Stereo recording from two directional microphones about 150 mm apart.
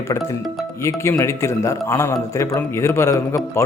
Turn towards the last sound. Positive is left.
turn(degrees=20)  # may be behind; listen again after turning